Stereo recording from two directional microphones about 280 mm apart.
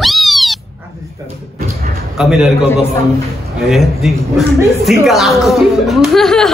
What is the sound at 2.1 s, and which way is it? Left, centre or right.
Speech, centre.